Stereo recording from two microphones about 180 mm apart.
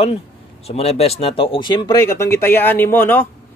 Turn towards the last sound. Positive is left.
turn(degrees=10)  # may be behind; listen again after turning